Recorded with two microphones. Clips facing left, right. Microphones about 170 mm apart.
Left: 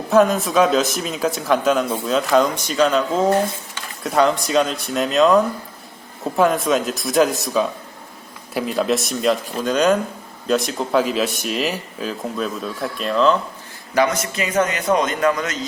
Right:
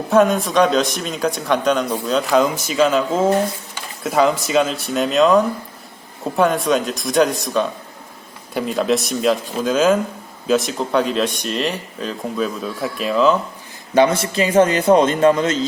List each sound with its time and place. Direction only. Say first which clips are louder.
0.1 s a man's voice: even; centre (ahead or behind)
13.9 s a man's voice: right 4 dB; 30° right (ahead or behind)